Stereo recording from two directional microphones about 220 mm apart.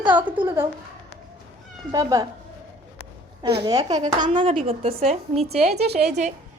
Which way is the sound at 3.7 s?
15° right (ahead or behind).